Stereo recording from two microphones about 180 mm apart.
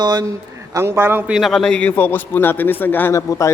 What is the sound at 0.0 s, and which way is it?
A man's voice, 25° right (ahead or behind).